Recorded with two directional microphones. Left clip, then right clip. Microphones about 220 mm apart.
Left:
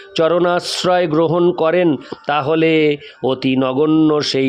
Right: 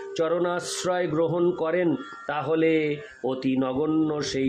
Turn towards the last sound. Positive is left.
turn(degrees=45)  # may be behind; listen again after turning